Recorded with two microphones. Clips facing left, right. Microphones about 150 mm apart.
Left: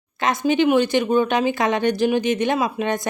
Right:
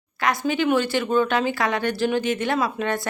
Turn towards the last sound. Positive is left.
turn(degrees=20)  # may be behind; listen again after turning